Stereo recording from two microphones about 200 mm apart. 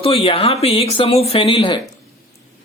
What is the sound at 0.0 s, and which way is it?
Speech, 25° left (ahead or behind).